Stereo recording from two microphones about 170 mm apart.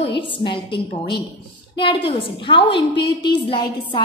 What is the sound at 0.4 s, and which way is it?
A woman's voice, 30° left (ahead or behind).